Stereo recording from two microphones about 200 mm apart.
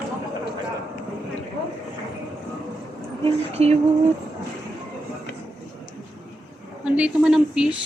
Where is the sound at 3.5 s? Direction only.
30° right (ahead or behind).